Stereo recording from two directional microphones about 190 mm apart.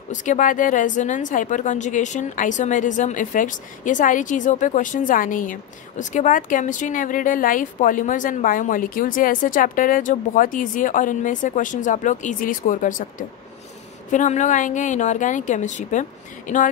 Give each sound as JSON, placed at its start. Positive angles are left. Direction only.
{"t": 0.1, "sound": "a woman's voice", "side_deg": 40}
{"t": 14.1, "sound": "a woman's voice", "side_deg": 40}